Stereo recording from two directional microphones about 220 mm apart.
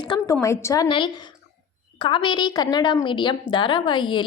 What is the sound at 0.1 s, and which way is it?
A woman's voice, 20° left (ahead or behind).